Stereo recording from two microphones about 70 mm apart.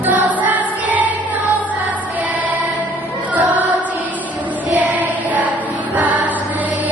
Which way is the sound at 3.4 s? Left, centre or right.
Right.